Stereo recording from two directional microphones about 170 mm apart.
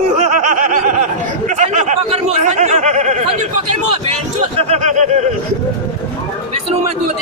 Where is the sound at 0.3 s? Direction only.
45° right (ahead or behind).